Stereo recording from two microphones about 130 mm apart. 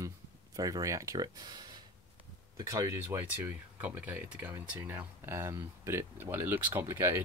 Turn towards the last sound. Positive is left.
turn(degrees=-20)  # may be behind; listen again after turning